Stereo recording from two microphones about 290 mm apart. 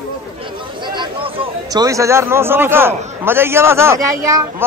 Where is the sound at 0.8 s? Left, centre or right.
Centre.